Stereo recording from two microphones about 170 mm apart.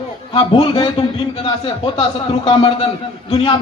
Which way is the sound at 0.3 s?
25° left (ahead or behind).